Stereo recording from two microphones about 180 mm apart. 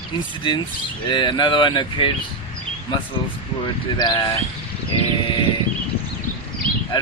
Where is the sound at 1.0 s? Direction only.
25° left (ahead or behind).